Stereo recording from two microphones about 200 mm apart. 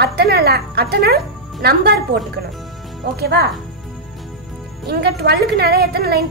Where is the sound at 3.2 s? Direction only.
55° right (ahead or behind).